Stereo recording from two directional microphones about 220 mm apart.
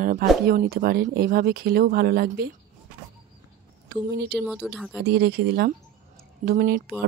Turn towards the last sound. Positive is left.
turn(degrees=-45)  # may be behind; listen again after turning